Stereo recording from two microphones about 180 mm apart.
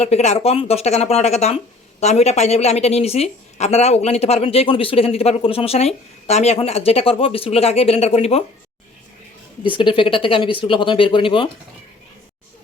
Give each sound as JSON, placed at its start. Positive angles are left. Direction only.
{"t": 0.0, "sound": "a woman's voice", "side_deg": 35}
{"t": 9.6, "sound": "speech", "side_deg": 30}